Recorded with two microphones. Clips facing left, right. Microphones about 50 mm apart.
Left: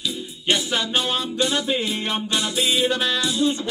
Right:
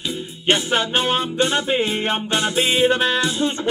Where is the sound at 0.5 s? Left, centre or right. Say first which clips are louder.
Right 4 dB; right.